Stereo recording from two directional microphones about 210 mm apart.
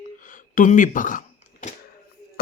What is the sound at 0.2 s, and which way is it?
Speech, 40° left (ahead or behind).